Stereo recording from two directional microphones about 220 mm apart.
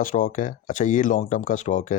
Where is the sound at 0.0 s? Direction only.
40° left (ahead or behind).